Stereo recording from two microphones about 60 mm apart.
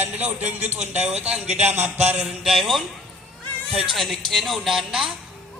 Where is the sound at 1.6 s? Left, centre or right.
Right.